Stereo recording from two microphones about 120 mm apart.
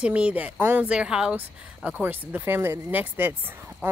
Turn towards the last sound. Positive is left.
turn(degrees=-20)  # may be behind; listen again after turning